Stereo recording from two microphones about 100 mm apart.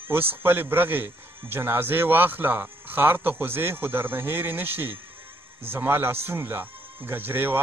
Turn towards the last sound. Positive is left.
turn(degrees=-20)  # may be behind; listen again after turning